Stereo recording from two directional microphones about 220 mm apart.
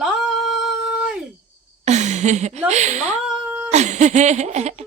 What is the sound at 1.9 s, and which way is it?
Speech, 30° right (ahead or behind).